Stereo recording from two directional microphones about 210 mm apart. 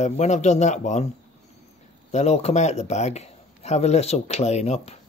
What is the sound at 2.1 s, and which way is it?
A man's voice, 30° left (ahead or behind).